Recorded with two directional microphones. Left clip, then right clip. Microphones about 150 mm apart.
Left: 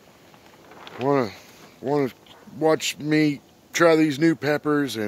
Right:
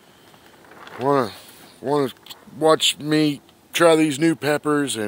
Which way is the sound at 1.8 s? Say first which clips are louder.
Right 2 dB; 5° left (ahead or behind).